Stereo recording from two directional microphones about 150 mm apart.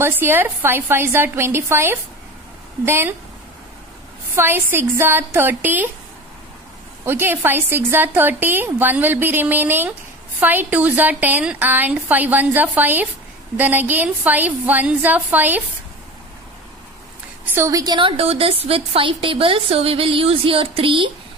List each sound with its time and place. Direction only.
0.0 s a woman's voice: 15° right (ahead or behind)
4.4 s a woman's voice: 15° right (ahead or behind)
7.1 s a woman's voice: 15° right (ahead or behind)
17.6 s a woman's voice: 20° right (ahead or behind)